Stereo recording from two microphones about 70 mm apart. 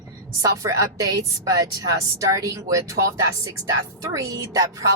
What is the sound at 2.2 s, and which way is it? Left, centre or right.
A woman's voice, right.